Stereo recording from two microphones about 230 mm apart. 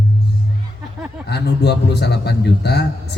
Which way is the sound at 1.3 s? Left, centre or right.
Left.